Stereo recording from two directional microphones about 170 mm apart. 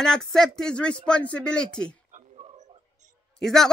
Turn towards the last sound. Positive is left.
turn(degrees=0)  # may be behind; listen again after turning